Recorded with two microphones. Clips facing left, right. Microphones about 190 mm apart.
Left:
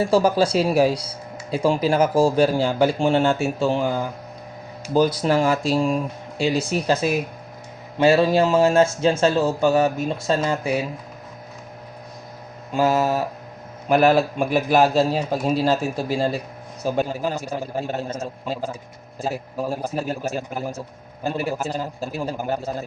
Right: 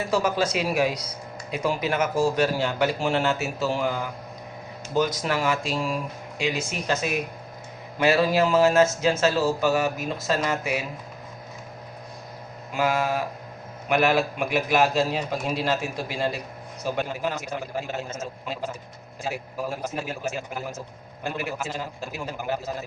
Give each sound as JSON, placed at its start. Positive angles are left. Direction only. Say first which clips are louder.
{"t": 0.0, "sound": "a man's voice", "louder": "left 6 dB", "side_deg": 30}
{"t": 12.7, "sound": "speech", "louder": "left 5 dB", "side_deg": 40}